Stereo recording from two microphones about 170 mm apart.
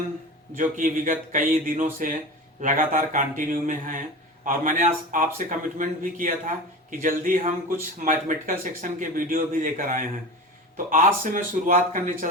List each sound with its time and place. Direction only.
0.5 s speech: 50° right (ahead or behind)